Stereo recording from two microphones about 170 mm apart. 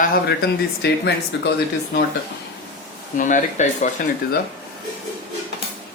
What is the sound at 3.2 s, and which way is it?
Speech, 50° left (ahead or behind).